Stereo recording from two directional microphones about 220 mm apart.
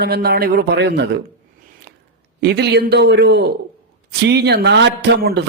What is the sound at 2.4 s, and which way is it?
Speech, 50° right (ahead or behind).